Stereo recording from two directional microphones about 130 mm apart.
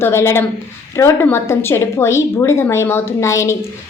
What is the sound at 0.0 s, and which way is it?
A woman's voice, 20° left (ahead or behind).